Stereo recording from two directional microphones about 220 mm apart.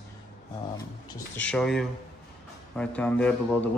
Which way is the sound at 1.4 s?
5° left (ahead or behind).